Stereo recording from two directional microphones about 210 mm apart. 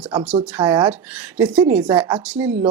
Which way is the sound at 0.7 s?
5° right (ahead or behind).